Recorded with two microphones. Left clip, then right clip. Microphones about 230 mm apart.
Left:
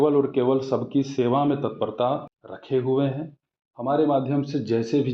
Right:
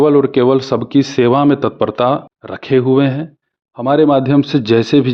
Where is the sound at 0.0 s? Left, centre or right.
Right.